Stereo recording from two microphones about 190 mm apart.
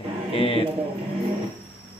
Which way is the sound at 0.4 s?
30° left (ahead or behind).